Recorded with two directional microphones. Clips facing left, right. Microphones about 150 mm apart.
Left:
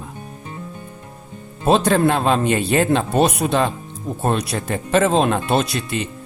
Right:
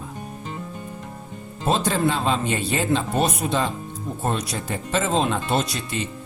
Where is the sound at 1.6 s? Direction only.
65° left (ahead or behind).